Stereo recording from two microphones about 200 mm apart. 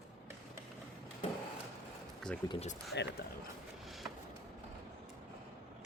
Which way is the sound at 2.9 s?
60° left (ahead or behind).